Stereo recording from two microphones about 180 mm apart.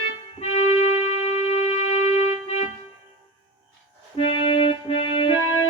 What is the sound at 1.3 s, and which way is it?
Music, 35° left (ahead or behind).